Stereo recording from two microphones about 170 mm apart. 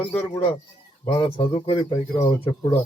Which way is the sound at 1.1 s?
30° left (ahead or behind).